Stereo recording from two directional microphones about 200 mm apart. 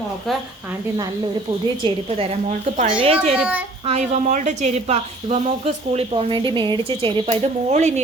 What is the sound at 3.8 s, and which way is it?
Speech, 35° right (ahead or behind).